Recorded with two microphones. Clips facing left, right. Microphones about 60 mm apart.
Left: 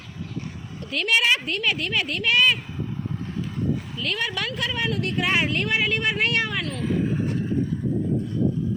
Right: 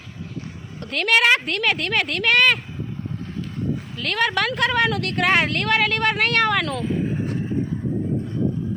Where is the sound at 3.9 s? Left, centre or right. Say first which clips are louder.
Right 6 dB; right.